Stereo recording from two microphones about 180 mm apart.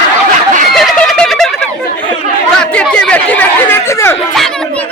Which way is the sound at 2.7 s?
5° left (ahead or behind).